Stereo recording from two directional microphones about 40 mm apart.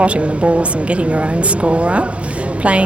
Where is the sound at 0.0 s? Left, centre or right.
Right.